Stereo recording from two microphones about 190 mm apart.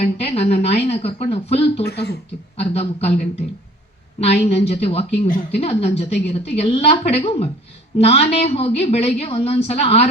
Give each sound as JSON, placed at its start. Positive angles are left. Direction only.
{"t": 0.0, "sound": "a woman's voice", "side_deg": 35}
{"t": 1.8, "sound": "speech", "side_deg": 60}
{"t": 2.6, "sound": "a woman's voice", "side_deg": 30}
{"t": 4.2, "sound": "a woman's voice", "side_deg": 35}